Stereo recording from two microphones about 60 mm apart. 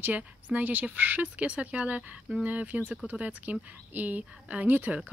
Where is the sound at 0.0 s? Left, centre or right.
Right.